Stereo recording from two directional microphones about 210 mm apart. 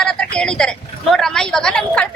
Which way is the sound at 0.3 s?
5° left (ahead or behind).